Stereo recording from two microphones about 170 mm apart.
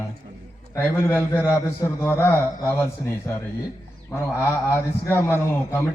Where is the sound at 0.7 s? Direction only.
15° left (ahead or behind).